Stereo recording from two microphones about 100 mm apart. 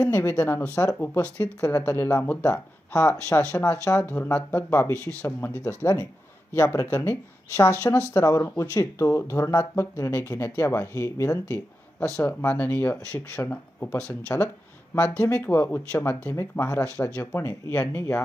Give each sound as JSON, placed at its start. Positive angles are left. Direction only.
{"t": 0.0, "sound": "speech", "side_deg": 20}
{"t": 11.9, "sound": "speech", "side_deg": 10}
{"t": 15.4, "sound": "speech", "side_deg": 25}